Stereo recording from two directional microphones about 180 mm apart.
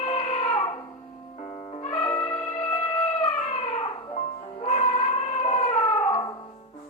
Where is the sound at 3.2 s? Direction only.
35° left (ahead or behind).